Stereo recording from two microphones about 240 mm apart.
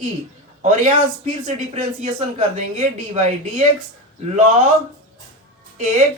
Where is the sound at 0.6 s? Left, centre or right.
Right.